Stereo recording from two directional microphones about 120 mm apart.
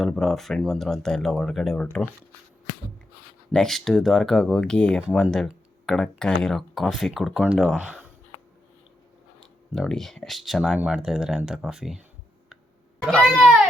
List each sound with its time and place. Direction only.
0.0 s speech: 5° left (ahead or behind)
3.5 s speech: 5° left (ahead or behind)
9.7 s speech: 5° left (ahead or behind)
13.1 s speech: 5° left (ahead or behind)